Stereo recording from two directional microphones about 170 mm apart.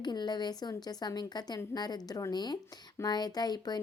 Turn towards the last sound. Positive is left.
turn(degrees=25)  # may be behind; listen again after turning